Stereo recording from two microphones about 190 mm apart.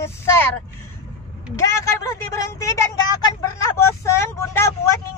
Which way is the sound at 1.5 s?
15° left (ahead or behind).